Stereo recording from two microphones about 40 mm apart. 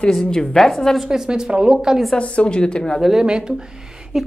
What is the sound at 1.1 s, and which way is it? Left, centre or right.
Speech, centre.